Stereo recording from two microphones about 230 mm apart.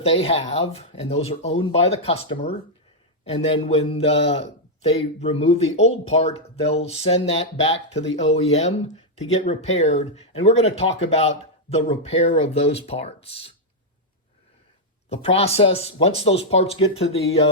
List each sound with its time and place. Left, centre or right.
0.0 s a man's voice: left
15.1 s a man's voice: left